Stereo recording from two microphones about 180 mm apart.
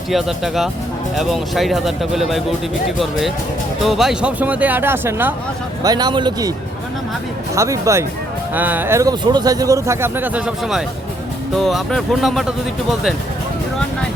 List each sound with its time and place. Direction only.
0.1 s speech: centre (ahead or behind); by 6.5 s 25° right (ahead or behind)
7.5 s speech: 15° right (ahead or behind); by 12.5 s centre (ahead or behind)